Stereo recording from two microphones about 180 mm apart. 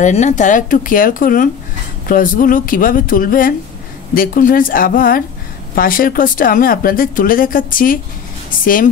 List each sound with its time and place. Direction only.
0.0 s speech: 40° left (ahead or behind)